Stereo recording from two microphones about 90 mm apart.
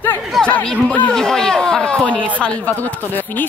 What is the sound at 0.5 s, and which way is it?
A man's voice, 15° left (ahead or behind).